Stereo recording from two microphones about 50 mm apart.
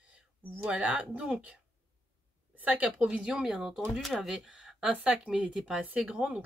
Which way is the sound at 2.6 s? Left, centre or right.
Right.